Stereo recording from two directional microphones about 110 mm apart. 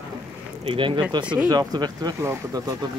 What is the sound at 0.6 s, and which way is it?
Speech, 50° right (ahead or behind).